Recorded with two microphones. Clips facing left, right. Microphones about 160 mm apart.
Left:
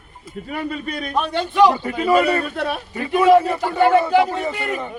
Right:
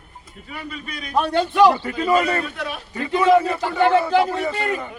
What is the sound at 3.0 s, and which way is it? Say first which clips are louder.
A man's voice: left 2 dB; 15° left (ahead or behind).